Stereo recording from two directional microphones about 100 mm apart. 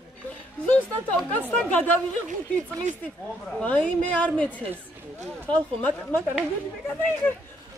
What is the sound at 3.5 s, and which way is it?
A woman's voice, 15° left (ahead or behind).